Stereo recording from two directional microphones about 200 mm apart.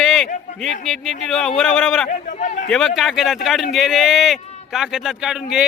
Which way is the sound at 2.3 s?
35° left (ahead or behind).